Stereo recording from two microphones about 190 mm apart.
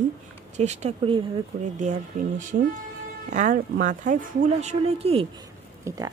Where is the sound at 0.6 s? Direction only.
35° right (ahead or behind).